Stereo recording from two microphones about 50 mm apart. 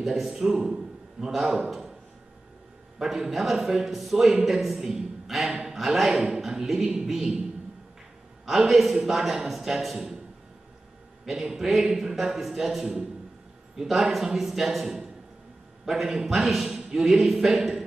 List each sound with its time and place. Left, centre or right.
0.0 s a man's voice: centre
3.0 s a man's voice: centre
8.5 s a man's voice: centre
11.2 s a man's voice: centre